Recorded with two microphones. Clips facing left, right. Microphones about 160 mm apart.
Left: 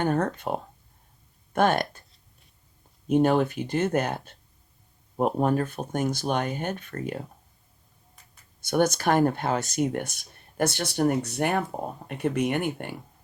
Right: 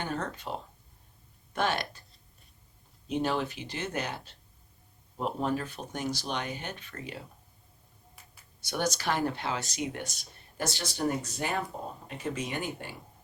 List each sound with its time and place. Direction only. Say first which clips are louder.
0.0 s speech: left 9 dB; 50° left (ahead or behind)
3.1 s speech: left 9 dB; 50° left (ahead or behind)
8.6 s speech: left 8 dB; 50° left (ahead or behind)